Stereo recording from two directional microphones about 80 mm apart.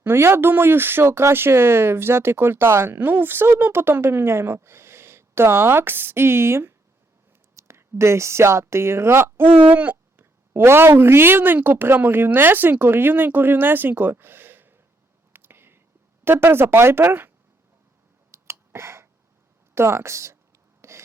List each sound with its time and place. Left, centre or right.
0.0 s speech: right
9.6 s speech: centre
15.3 s whispering: right
16.2 s speech: right
18.3 s a sound: right
19.7 s speech: right
20.8 s a sound: right